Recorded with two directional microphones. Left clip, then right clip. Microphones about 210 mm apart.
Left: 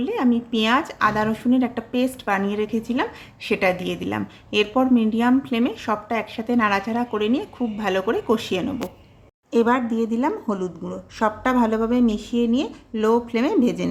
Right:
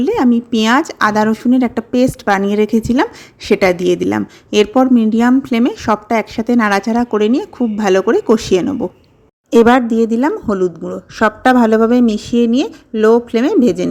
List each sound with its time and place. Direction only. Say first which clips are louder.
0.0 s speech: right 8 dB; 30° right (ahead or behind)